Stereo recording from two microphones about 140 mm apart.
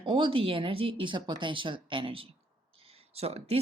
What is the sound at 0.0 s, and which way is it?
Speech, 40° right (ahead or behind).